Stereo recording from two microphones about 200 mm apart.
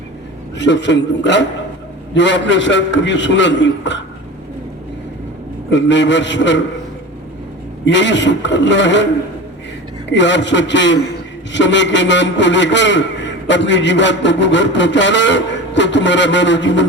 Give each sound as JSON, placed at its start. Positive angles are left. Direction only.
{"t": 0.6, "sound": "a man's voice", "side_deg": 60}
{"t": 5.7, "sound": "a man's voice", "side_deg": 65}
{"t": 7.9, "sound": "a man's voice", "side_deg": 65}
{"t": 10.1, "sound": "a man's voice", "side_deg": 65}